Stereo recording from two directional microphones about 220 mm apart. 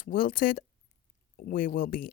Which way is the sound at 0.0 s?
40° left (ahead or behind).